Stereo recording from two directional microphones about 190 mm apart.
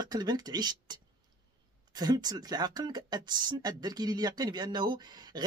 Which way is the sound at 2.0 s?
20° right (ahead or behind).